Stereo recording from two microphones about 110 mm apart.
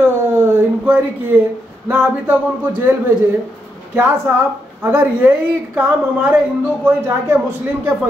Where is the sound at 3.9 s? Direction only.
20° right (ahead or behind).